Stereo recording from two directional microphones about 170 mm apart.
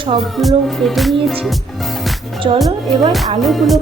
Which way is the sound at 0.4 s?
Centre (ahead or behind).